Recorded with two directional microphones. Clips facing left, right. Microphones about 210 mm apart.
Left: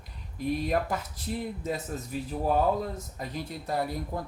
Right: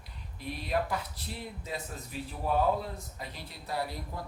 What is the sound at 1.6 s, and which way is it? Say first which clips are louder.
Speech: left 7 dB; 45° left (ahead or behind).